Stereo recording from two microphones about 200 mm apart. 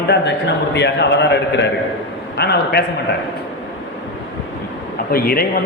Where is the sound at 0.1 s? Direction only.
60° left (ahead or behind).